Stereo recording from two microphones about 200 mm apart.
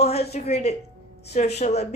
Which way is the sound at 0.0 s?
30° left (ahead or behind).